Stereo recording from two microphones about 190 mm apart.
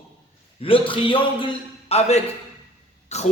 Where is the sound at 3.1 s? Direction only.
35° left (ahead or behind).